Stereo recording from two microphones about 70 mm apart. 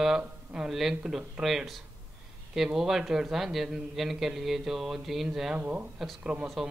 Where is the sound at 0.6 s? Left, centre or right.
Centre.